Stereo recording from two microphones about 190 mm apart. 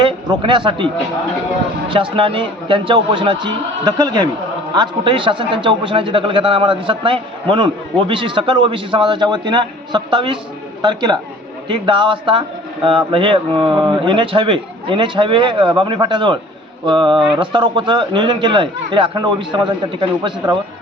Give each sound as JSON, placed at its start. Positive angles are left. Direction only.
{"t": 0.0, "sound": "a man's voice", "side_deg": -25}
{"t": 1.9, "sound": "a man's voice", "side_deg": -25}